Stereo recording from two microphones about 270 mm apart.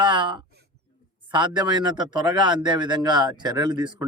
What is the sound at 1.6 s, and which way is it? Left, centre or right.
Speech, centre.